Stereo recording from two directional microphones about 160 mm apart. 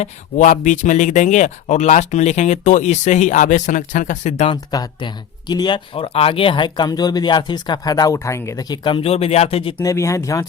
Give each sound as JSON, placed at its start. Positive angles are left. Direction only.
{"t": 0.0, "sound": "speech", "side_deg": 50}
{"t": 4.5, "sound": "speech", "side_deg": 25}
{"t": 9.8, "sound": "speech", "side_deg": 20}